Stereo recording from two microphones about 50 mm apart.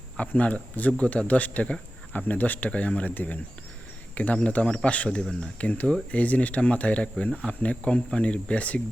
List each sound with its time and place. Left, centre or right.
0.2 s speech: left